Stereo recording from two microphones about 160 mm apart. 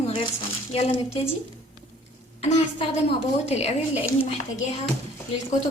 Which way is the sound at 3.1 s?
40° left (ahead or behind).